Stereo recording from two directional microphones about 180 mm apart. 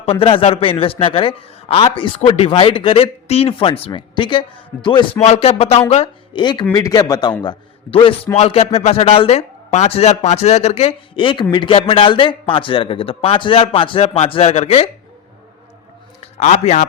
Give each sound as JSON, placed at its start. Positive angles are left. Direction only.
{"t": 0.0, "sound": "a man's voice", "side_deg": 30}
{"t": 16.2, "sound": "a man's voice", "side_deg": 40}